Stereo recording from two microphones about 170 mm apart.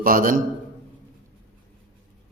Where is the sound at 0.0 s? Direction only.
55° right (ahead or behind).